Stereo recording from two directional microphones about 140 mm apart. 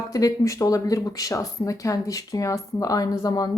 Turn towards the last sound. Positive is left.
turn(degrees=25)  # may be behind; listen again after turning